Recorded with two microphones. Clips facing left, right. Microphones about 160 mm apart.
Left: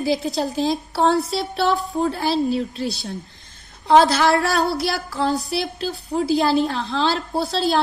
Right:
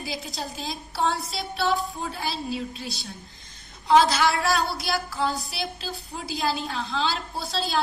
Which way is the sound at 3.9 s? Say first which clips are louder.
Left 5 dB; 50° left (ahead or behind).